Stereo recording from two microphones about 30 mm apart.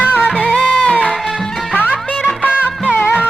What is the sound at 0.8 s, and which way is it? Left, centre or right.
Music, left.